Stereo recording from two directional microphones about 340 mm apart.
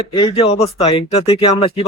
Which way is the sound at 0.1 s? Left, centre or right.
Centre.